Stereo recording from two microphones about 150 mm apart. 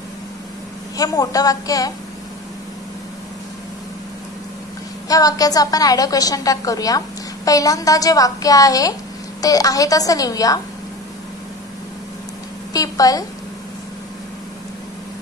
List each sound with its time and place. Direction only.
0.9 s a woman's voice: 25° left (ahead or behind)
5.0 s a woman's voice: 25° left (ahead or behind)
12.7 s a woman's voice: 25° left (ahead or behind)